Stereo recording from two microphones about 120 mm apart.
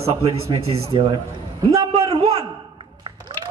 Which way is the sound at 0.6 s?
55° right (ahead or behind).